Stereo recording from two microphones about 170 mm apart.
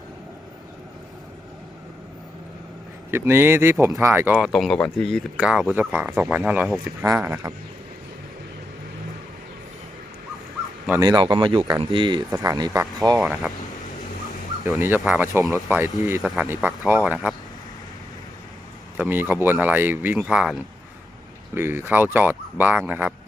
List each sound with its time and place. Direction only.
3.1 s speech: 15° right (ahead or behind)
11.0 s speech: 25° right (ahead or behind)
13.2 s speech: centre (ahead or behind)
14.6 s speech: 15° right (ahead or behind)
18.9 s speech: 10° right (ahead or behind)